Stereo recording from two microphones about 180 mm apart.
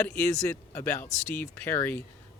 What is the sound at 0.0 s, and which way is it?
Speech, 10° left (ahead or behind).